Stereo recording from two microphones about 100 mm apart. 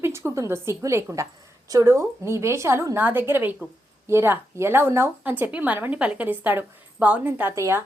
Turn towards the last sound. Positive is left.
turn(degrees=-25)  # may be behind; listen again after turning